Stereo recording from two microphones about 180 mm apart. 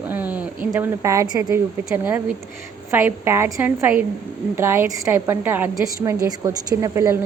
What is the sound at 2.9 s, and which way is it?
A woman's voice, 15° right (ahead or behind).